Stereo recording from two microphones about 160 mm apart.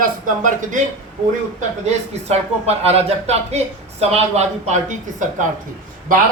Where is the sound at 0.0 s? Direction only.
55° right (ahead or behind).